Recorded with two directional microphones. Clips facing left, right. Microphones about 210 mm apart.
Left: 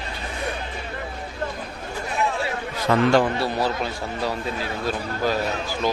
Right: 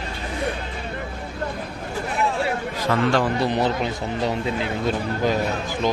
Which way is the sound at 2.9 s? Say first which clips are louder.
Left 3 dB; 30° left (ahead or behind).